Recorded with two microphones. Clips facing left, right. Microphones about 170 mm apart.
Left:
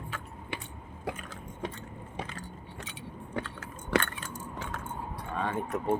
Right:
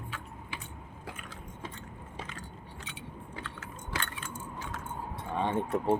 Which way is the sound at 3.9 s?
55° left (ahead or behind).